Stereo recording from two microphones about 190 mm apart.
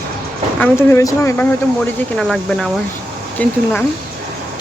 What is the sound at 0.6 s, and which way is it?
Speech, 10° left (ahead or behind).